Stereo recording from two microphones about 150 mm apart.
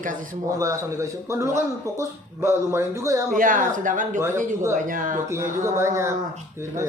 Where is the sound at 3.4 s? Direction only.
65° right (ahead or behind).